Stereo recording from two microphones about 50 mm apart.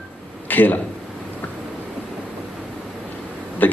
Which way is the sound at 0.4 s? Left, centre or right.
Left.